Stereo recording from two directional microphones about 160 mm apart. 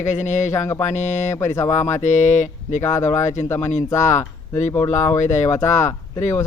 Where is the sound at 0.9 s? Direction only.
45° left (ahead or behind).